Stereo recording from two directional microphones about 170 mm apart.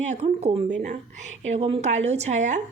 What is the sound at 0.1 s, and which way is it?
A woman's voice, 45° right (ahead or behind).